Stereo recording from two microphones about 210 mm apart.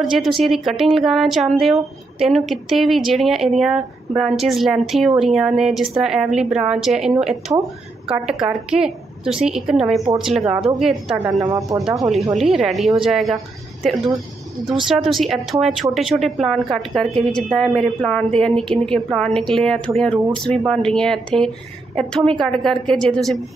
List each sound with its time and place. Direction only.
0.0 s speech: centre (ahead or behind)
11.4 s speech: 15° right (ahead or behind)
12.0 s speech: centre (ahead or behind)
14.9 s speech: centre (ahead or behind)